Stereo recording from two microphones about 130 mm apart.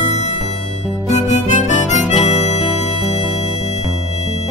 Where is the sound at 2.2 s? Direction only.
55° left (ahead or behind).